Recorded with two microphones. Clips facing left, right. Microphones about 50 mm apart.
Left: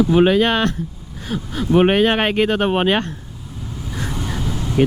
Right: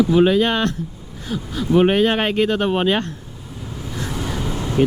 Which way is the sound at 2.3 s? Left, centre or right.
Left.